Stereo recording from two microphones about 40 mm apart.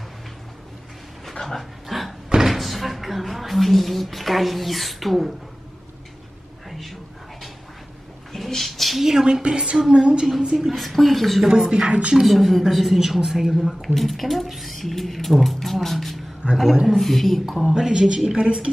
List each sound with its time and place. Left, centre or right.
1.3 s dog: centre
1.9 s slam: centre
2.4 s speech: centre
6.7 s a sound: centre
8.5 s a sound: centre
9.0 s a woman's voice: centre
10.7 s a woman's voice: centre
11.4 s speech: centre
11.9 s speech: right
12.3 s a woman's voice: centre
16.4 s speech: right
16.8 s a woman's voice: centre
17.7 s speech: centre